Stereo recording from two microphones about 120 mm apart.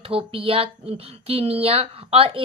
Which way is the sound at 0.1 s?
50° right (ahead or behind).